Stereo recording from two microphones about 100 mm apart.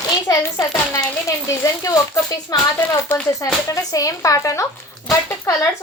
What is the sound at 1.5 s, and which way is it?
A woman's voice, 35° left (ahead or behind).